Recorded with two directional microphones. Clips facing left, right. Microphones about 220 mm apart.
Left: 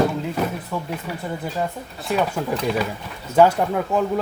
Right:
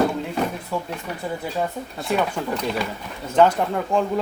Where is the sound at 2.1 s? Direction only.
5° left (ahead or behind).